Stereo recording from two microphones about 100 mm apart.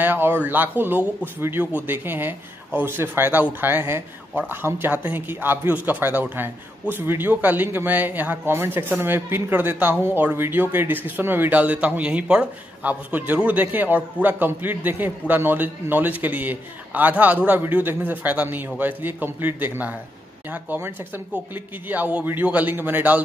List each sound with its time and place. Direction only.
0.0 s a man's voice: 20° right (ahead or behind)